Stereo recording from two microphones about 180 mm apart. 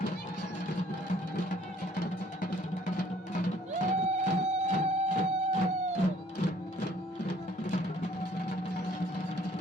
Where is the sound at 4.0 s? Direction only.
35° right (ahead or behind).